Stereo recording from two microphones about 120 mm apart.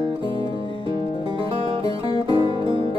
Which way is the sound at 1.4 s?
50° right (ahead or behind).